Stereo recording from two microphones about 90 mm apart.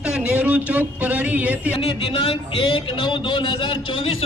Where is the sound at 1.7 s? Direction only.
85° left.